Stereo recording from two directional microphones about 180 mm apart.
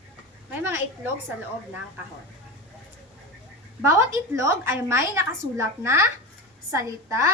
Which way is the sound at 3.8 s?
15° right (ahead or behind).